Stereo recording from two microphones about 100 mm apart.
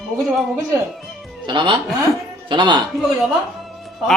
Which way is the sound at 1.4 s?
50° right (ahead or behind).